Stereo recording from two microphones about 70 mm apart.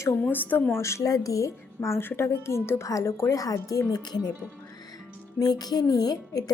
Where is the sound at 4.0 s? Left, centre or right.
Left.